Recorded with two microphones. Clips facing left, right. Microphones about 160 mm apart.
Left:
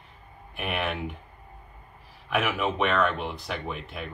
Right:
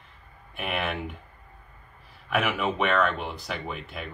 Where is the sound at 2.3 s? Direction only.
Centre (ahead or behind).